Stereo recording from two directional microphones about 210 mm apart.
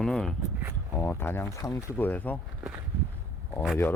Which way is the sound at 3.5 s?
Centre (ahead or behind).